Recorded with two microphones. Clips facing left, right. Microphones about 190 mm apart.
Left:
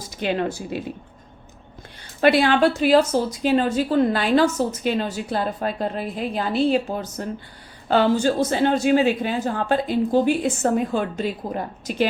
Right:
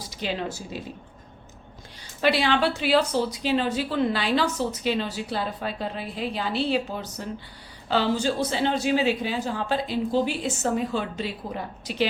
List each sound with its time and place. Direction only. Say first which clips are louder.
0.1 s speech: left 7 dB; 55° left (ahead or behind)
2.2 s a woman's voice: left 6 dB; 50° left (ahead or behind)